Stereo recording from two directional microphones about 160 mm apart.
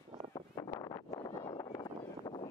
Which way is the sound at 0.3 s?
20° left (ahead or behind).